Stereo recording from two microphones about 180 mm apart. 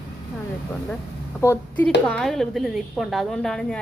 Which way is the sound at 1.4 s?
10° left (ahead or behind).